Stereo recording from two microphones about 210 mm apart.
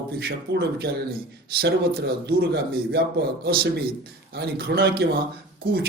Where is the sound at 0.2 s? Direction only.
50° right (ahead or behind).